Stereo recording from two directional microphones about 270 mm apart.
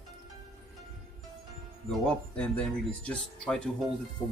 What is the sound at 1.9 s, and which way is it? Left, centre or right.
Speech, centre.